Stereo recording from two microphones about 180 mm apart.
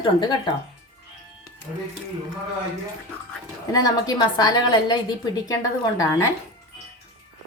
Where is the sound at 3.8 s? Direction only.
20° left (ahead or behind).